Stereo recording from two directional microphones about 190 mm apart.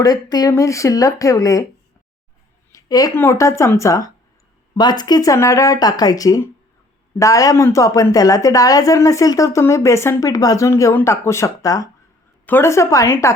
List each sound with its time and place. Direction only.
0.0 s a woman's voice: 20° left (ahead or behind)
2.7 s a woman's voice: 20° left (ahead or behind)